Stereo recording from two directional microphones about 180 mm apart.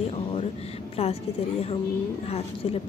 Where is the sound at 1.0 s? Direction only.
35° left (ahead or behind).